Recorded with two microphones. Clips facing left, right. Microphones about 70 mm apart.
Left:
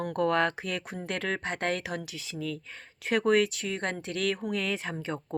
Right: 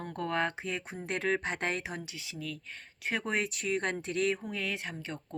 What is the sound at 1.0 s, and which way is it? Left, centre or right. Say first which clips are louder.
Speech: right 2 dB; left.